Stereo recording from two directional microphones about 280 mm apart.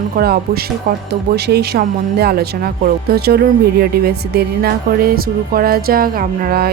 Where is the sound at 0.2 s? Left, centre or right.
Right.